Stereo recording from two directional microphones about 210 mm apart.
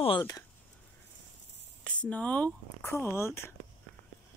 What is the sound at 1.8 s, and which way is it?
Speech, 5° left (ahead or behind).